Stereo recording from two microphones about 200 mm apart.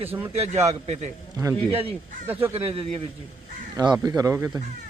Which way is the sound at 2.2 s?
10° right (ahead or behind).